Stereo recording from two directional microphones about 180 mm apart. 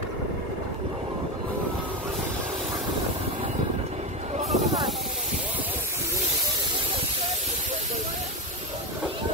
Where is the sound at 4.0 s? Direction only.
40° right (ahead or behind).